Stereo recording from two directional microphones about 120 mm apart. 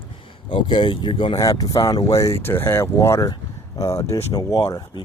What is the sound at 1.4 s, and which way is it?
Speech, 30° left (ahead or behind).